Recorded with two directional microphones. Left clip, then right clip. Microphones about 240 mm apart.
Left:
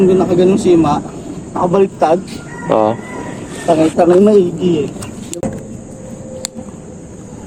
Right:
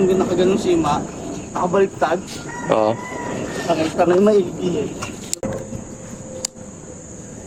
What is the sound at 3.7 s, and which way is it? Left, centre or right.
Speech, left.